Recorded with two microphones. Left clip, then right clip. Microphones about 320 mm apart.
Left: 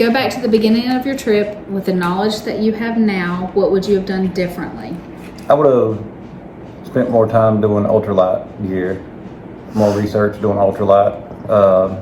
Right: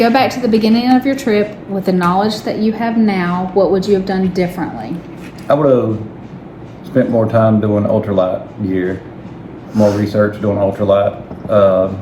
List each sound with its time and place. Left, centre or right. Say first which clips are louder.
0.0 s a woman's voice: right 3 dB; centre
5.5 s a man's voice: even; centre
6.9 s a man's voice: even; centre
9.7 s speech: right 2 dB; centre
10.1 s a man's voice: right 1 dB; centre